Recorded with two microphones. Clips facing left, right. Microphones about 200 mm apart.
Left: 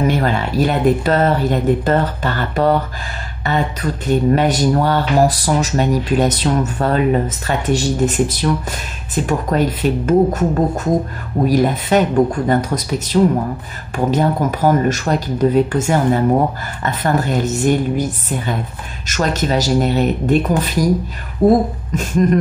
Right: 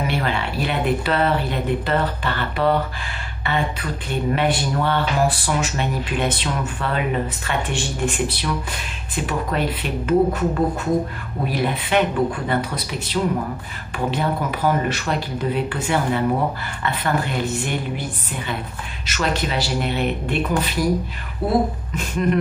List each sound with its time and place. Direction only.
0.0 s speech: 45° left (ahead or behind)